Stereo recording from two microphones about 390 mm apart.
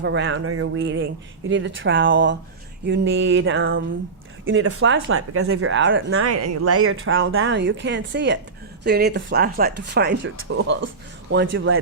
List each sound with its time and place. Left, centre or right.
0.0 s speech: right